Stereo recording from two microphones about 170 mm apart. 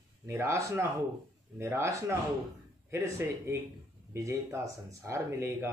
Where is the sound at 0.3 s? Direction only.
15° right (ahead or behind).